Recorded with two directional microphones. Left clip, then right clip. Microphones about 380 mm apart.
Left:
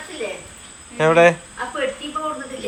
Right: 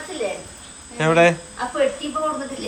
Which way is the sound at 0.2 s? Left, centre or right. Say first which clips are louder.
Right 2 dB; right.